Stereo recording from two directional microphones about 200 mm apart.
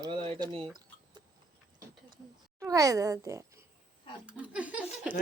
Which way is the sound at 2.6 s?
15° right (ahead or behind).